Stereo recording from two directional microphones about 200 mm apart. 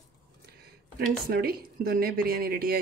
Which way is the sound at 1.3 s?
50° right (ahead or behind).